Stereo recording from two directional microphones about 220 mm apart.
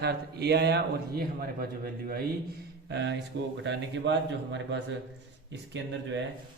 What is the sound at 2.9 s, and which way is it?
A man's voice, 55° right (ahead or behind).